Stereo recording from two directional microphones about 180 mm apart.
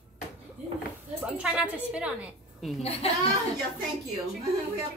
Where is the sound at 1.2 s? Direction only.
5° right (ahead or behind).